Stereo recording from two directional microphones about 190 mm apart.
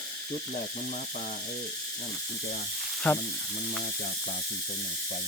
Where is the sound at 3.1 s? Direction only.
5° left (ahead or behind).